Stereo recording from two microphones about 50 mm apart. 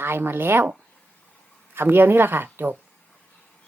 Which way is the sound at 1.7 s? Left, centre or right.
Right.